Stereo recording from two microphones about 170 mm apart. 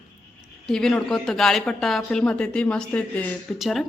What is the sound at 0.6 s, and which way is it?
Speech, 5° left (ahead or behind).